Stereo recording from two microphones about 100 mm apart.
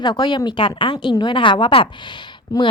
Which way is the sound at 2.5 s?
35° left (ahead or behind).